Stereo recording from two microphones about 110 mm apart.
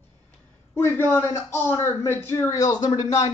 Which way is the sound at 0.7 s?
20° left (ahead or behind).